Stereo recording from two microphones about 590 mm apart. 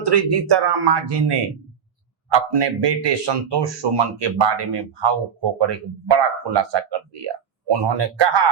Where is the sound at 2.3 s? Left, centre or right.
Right.